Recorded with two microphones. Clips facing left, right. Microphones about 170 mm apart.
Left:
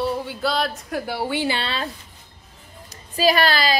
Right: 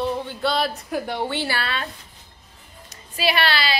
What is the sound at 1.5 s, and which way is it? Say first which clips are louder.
Speech: left 1 dB; 30° left (ahead or behind).